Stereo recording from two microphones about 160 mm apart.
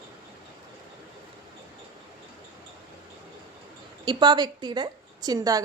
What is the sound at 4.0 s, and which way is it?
A woman's voice, 30° right (ahead or behind).